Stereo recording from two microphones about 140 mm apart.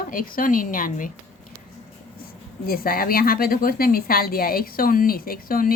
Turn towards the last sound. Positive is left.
turn(degrees=90)